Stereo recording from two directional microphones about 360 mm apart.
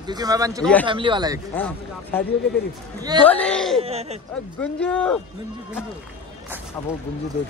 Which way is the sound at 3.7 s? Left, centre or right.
Centre.